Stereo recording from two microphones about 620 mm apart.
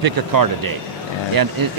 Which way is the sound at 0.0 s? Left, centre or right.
Right.